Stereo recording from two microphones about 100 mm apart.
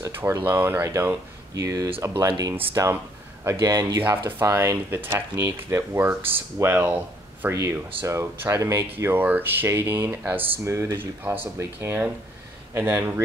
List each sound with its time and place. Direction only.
0.2 s speech: 25° right (ahead or behind)
1.5 s speech: 35° right (ahead or behind)
8.9 s speech: 20° right (ahead or behind)